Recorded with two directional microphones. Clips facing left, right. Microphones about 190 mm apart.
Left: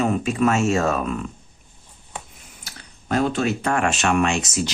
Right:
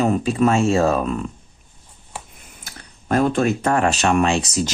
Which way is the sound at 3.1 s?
50° right (ahead or behind).